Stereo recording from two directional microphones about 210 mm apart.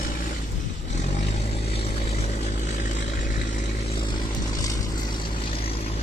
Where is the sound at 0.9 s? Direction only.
30° left (ahead or behind).